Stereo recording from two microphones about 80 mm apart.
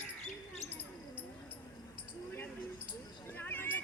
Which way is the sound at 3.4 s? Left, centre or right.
Left.